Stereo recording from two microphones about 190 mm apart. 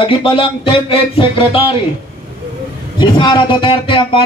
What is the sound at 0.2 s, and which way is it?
Speech, 30° left (ahead or behind).